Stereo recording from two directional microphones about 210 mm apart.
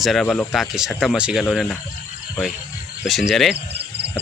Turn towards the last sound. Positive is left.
turn(degrees=-50)  # may be behind; listen again after turning